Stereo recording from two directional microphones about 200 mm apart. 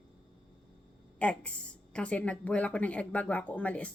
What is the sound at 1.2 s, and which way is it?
Speech, 5° left (ahead or behind).